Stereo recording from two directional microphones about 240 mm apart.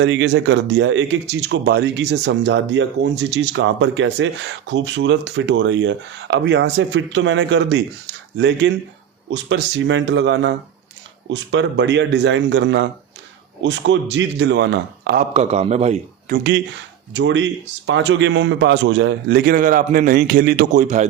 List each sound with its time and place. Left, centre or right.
0.0 s speech: right
15.2 s a man's voice: right
17.2 s speech: right